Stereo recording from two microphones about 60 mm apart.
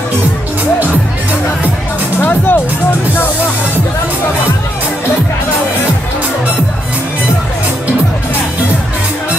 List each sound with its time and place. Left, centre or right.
2.2 s music: left